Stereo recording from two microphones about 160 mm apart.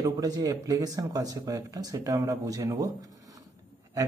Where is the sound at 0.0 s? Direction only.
20° right (ahead or behind).